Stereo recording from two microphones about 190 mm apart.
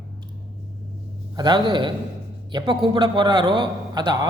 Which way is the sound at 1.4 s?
25° right (ahead or behind).